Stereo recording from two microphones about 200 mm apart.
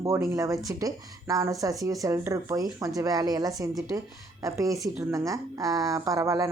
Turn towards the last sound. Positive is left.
turn(degrees=-15)  # may be behind; listen again after turning